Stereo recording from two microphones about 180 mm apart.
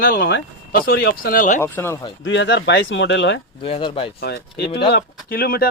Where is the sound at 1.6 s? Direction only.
15° left (ahead or behind).